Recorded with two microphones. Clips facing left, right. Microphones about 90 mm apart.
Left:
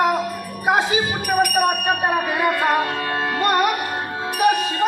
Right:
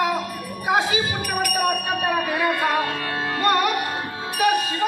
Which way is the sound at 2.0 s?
30° left (ahead or behind).